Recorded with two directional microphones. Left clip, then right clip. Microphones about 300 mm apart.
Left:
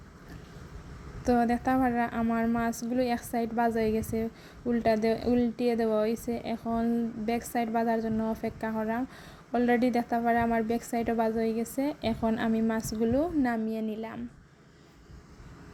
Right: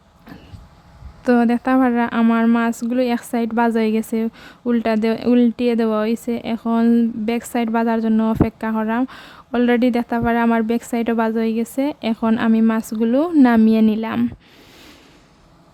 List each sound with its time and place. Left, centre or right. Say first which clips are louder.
1.2 s speech: right 9 dB; centre